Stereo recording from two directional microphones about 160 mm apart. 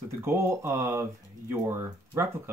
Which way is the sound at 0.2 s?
15° right (ahead or behind).